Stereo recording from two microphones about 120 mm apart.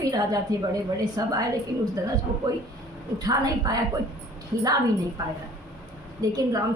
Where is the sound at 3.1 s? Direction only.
30° right (ahead or behind).